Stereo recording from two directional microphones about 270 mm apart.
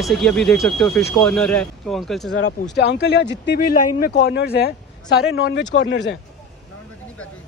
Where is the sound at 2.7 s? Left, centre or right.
Left.